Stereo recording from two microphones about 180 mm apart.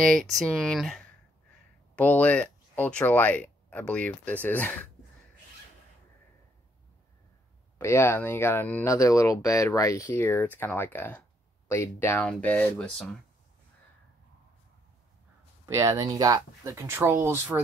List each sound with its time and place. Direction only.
0.0 s speech: 5° left (ahead or behind)
7.8 s speech: 15° left (ahead or behind)
15.6 s speech: 20° right (ahead or behind)